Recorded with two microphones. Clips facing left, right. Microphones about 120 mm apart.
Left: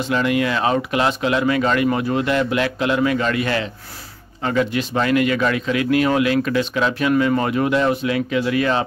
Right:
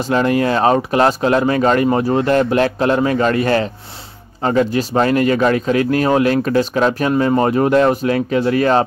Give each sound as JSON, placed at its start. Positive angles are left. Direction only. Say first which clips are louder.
{"t": 0.0, "sound": "speech", "louder": "right 4 dB", "side_deg": -40}